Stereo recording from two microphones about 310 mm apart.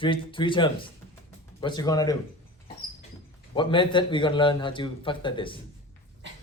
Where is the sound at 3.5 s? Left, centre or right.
Centre.